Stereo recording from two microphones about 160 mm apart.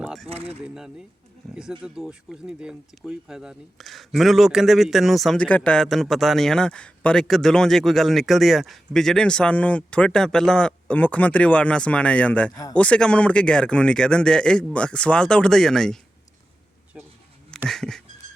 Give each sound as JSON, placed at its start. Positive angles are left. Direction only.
{"t": 0.0, "sound": "a sound", "side_deg": 0}
{"t": 0.3, "sound": "speech", "side_deg": -35}
{"t": 0.6, "sound": "speech", "side_deg": -5}
{"t": 17.7, "sound": "speech", "side_deg": 5}